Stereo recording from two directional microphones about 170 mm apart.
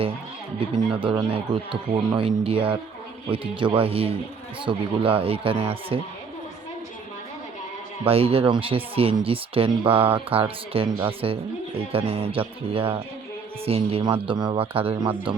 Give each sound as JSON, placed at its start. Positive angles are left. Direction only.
{"t": 1.3, "sound": "speech", "side_deg": -30}
{"t": 8.0, "sound": "speech", "side_deg": -35}